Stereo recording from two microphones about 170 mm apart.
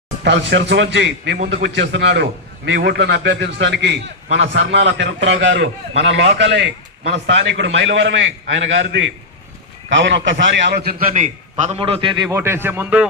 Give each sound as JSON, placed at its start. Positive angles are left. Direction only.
{"t": 0.3, "sound": "a man's voice", "side_deg": -90}
{"t": 12.3, "sound": "a man's voice", "side_deg": -15}